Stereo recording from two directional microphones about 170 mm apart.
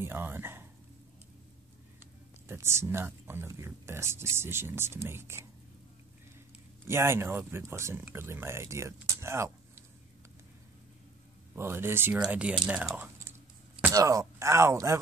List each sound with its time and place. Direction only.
0.0 s speech: 15° right (ahead or behind)
2.4 s speech: 15° right (ahead or behind)
6.9 s speech: 15° right (ahead or behind)
11.5 s speech: 15° right (ahead or behind)
13.9 s speech: 20° right (ahead or behind)